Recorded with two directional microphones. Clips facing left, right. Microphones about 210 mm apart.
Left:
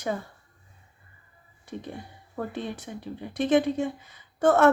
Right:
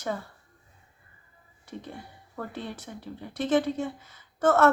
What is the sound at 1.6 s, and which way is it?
Speech, 15° left (ahead or behind).